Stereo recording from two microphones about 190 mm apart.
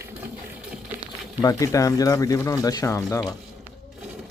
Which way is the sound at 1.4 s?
15° left (ahead or behind).